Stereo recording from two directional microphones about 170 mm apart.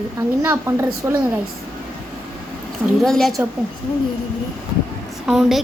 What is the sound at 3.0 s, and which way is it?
Speech, centre (ahead or behind).